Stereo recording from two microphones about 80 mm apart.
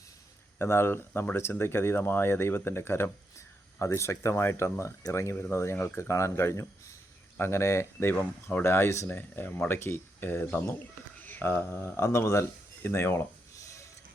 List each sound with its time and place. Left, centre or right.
0.6 s speech: left
8.1 s speech: left
13.6 s mechanisms: left